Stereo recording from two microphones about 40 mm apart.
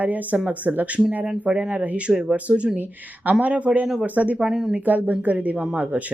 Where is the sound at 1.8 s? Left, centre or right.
Right.